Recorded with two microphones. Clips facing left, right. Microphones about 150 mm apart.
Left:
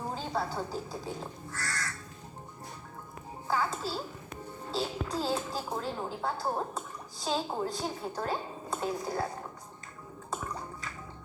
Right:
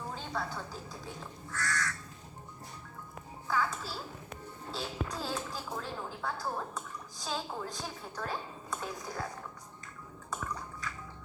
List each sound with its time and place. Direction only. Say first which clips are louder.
0.1 s speech: left 4 dB; 35° left (ahead or behind)
3.4 s a child's voice: left 2 dB; 30° left (ahead or behind)
10.2 s a sound: left 2 dB; 30° left (ahead or behind)